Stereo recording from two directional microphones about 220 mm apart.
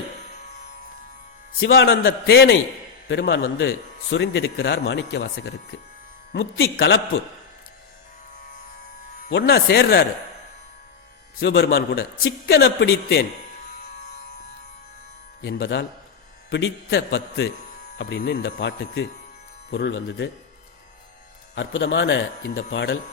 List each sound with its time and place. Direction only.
1.5 s a man's voice: 55° left (ahead or behind)
6.3 s speech: 65° left (ahead or behind)
6.7 s a man's voice: 50° left (ahead or behind)
9.3 s a man's voice: 50° left (ahead or behind)
11.3 s a man's voice: 45° left (ahead or behind)
15.4 s a man's voice: 50° left (ahead or behind)
21.5 s speech: 55° left (ahead or behind)